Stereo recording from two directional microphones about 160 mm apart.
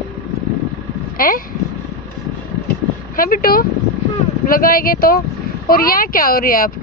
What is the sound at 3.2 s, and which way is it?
Speech, 65° left (ahead or behind).